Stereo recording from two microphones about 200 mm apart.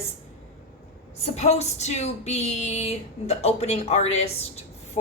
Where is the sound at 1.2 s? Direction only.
30° left (ahead or behind).